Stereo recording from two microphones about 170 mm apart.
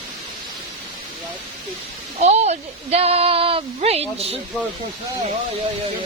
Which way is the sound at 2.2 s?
40° right (ahead or behind).